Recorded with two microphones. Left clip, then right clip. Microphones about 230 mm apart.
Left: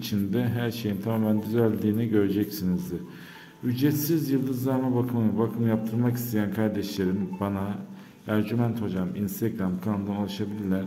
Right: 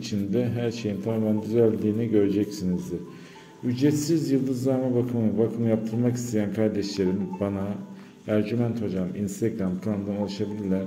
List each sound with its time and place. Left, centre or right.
0.1 s a man's voice: centre
3.6 s a man's voice: centre